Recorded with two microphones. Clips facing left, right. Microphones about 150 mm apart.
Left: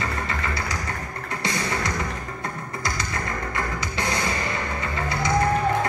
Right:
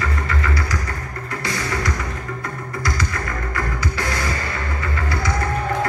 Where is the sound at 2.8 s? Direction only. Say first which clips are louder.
Right 3 dB; 25° left (ahead or behind).